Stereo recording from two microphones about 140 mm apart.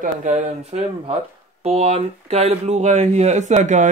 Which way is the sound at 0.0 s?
60° right (ahead or behind).